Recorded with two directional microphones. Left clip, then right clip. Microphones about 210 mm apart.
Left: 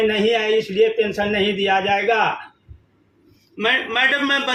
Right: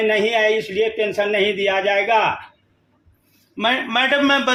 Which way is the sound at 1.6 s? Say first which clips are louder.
Even; 40° right (ahead or behind).